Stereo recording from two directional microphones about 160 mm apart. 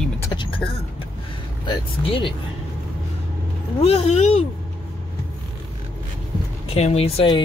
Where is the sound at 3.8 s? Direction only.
40° left (ahead or behind).